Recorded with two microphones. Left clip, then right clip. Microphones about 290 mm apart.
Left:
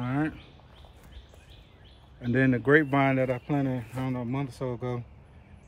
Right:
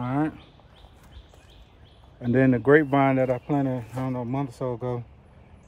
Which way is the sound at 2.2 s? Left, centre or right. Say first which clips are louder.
Right 4 dB; centre.